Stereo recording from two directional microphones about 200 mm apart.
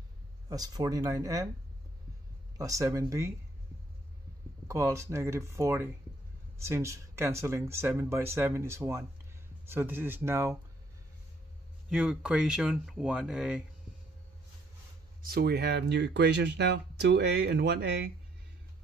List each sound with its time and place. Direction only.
0.5 s speech: 20° right (ahead or behind)
2.5 s speech: 15° right (ahead or behind)
4.6 s speech: 15° right (ahead or behind)
11.9 s speech: 5° right (ahead or behind)
15.2 s speech: 50° right (ahead or behind)